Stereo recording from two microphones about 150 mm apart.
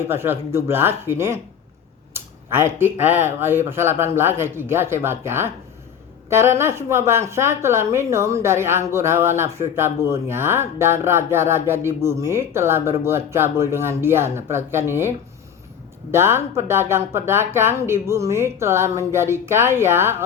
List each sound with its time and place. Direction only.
0.1 s a woman's voice: 15° right (ahead or behind)
16.1 s a woman's voice: 15° right (ahead or behind)